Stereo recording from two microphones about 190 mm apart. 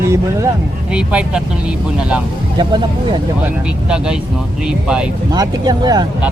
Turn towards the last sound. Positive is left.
turn(degrees=-20)  # may be behind; listen again after turning